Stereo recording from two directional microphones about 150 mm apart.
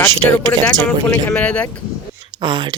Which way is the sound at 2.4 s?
30° right (ahead or behind).